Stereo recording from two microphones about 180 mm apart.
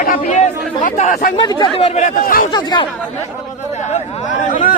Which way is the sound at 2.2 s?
50° left (ahead or behind).